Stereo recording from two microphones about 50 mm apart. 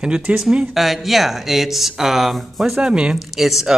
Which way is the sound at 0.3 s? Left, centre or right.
Right.